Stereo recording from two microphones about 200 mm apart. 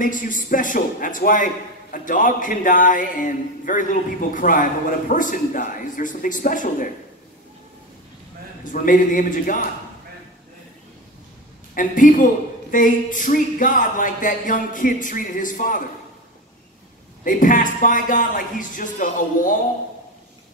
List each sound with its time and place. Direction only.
0.0 s a man's voice: 40° left (ahead or behind)
8.7 s a man's voice: 40° left (ahead or behind)
11.7 s a man's voice: 40° left (ahead or behind)
17.2 s a man's voice: 40° left (ahead or behind)